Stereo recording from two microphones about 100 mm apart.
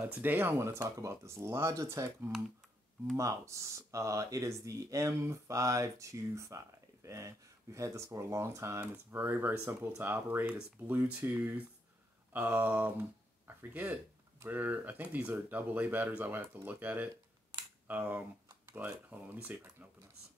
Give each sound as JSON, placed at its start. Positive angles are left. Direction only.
{"t": 0.0, "sound": "speech", "side_deg": -20}